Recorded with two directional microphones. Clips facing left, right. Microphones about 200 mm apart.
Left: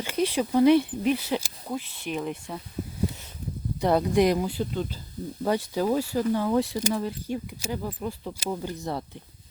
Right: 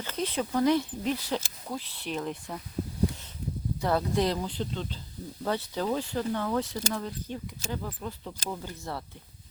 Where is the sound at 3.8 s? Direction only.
20° left (ahead or behind).